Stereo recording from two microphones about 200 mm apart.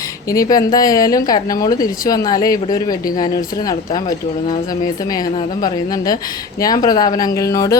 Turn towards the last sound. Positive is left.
turn(degrees=15)  # may be behind; listen again after turning